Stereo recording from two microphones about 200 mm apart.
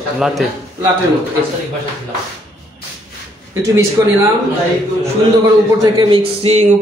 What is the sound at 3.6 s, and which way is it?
Speech, 15° right (ahead or behind).